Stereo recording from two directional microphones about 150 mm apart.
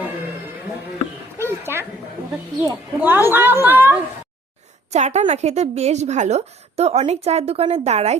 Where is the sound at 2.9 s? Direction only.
15° right (ahead or behind).